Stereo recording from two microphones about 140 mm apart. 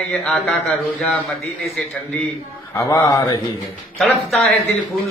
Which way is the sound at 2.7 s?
25° left (ahead or behind).